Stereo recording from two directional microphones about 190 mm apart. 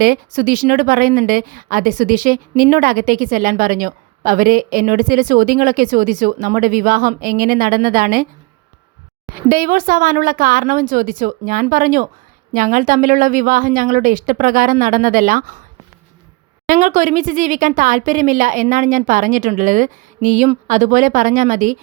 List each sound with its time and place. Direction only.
0.0 s a woman's voice: 50° right (ahead or behind)
9.3 s a woman's voice: 50° right (ahead or behind)
16.6 s a woman's voice: 45° right (ahead or behind)